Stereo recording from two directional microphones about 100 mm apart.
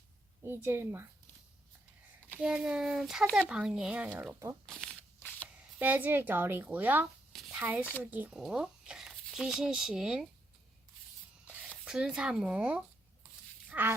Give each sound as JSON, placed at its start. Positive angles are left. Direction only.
{"t": 0.4, "sound": "speech", "side_deg": -25}
{"t": 2.4, "sound": "a child's voice", "side_deg": -5}
{"t": 4.6, "sound": "speech", "side_deg": 5}
{"t": 5.8, "sound": "speech", "side_deg": -15}
{"t": 7.3, "sound": "a sound", "side_deg": 0}
{"t": 7.6, "sound": "speech", "side_deg": -15}
{"t": 8.3, "sound": "speech", "side_deg": -5}
{"t": 11.4, "sound": "a sound", "side_deg": -10}
{"t": 11.9, "sound": "speech", "side_deg": -5}
{"t": 13.7, "sound": "a sound", "side_deg": -20}